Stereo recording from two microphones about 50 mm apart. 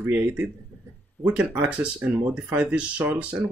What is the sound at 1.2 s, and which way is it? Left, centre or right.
Speech, right.